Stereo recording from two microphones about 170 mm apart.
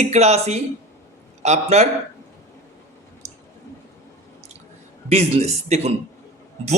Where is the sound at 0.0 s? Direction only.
40° right (ahead or behind).